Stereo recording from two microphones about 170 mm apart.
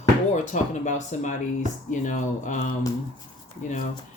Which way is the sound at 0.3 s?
45° left (ahead or behind).